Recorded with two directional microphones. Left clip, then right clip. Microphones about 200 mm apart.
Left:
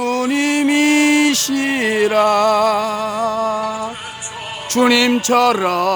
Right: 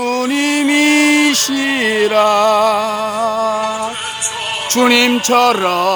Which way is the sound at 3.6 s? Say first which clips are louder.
Right 3 dB; 30° right (ahead or behind).